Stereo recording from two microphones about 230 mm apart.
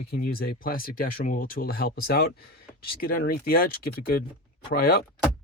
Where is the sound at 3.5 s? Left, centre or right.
Left.